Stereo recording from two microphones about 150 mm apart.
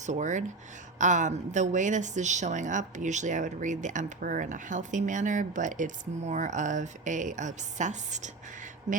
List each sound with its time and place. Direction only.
0.0 s speech: 55° right (ahead or behind)